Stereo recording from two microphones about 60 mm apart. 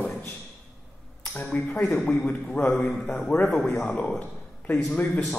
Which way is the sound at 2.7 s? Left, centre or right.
Centre.